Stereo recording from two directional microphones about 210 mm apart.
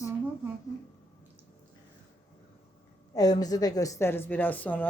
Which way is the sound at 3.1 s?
20° left (ahead or behind).